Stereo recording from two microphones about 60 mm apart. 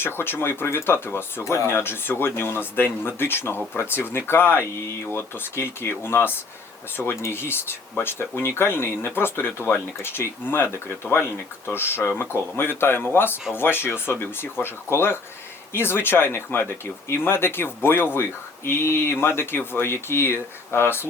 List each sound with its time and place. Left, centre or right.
0.0 s speech: left